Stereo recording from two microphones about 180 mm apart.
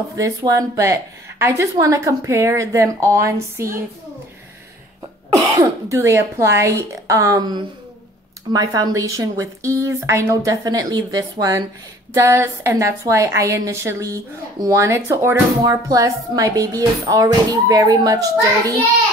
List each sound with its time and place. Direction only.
0.1 s a woman's voice: 20° right (ahead or behind)
5.3 s a woman's voice: 15° right (ahead or behind)